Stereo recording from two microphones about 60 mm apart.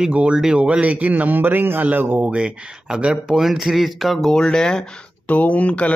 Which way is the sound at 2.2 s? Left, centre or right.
Centre.